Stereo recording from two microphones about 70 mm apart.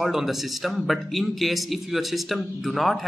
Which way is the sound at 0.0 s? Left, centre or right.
Centre.